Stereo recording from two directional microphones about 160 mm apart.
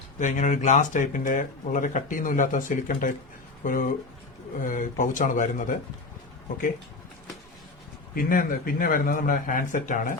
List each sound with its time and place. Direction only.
0.2 s a man's voice: 50° left (ahead or behind)
8.1 s a man's voice: 65° left (ahead or behind)